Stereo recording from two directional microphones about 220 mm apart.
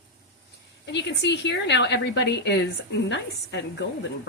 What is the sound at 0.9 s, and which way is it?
Speech, 50° left (ahead or behind).